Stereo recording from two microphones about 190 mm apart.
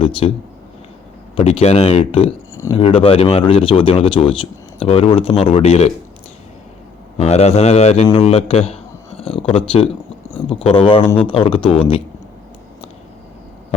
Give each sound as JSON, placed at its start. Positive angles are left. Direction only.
{"t": 0.2, "sound": "a man's voice", "side_deg": 30}
{"t": 1.4, "sound": "a man's voice", "side_deg": 30}
{"t": 7.2, "sound": "a man's voice", "side_deg": 35}